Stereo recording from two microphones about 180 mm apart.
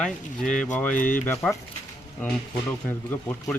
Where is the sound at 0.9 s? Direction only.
45° left (ahead or behind).